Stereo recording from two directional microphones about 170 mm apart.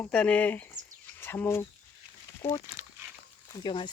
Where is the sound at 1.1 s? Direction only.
15° left (ahead or behind).